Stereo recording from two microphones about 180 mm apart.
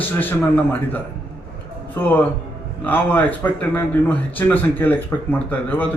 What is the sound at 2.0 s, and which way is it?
Speech, 10° left (ahead or behind).